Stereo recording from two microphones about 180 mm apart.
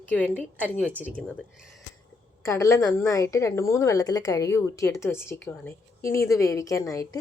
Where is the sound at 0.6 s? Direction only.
10° right (ahead or behind).